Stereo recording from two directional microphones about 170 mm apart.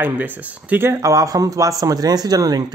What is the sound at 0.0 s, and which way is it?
Speech, 10° right (ahead or behind).